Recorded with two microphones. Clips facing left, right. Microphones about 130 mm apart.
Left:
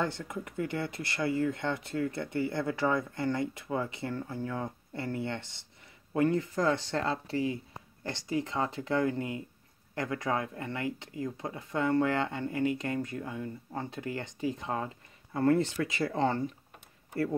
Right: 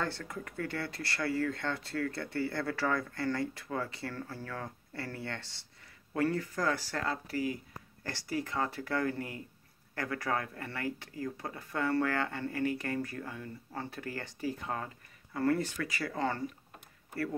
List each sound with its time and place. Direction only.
0.0 s speech: 20° left (ahead or behind)